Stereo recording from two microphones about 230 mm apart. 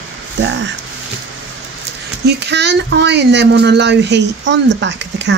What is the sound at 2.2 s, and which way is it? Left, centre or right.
Speech, right.